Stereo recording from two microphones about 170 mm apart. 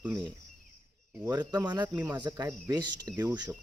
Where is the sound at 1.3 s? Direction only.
25° right (ahead or behind).